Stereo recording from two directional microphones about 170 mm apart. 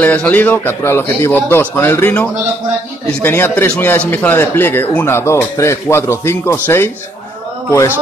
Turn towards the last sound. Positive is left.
turn(degrees=15)  # may be behind; listen again after turning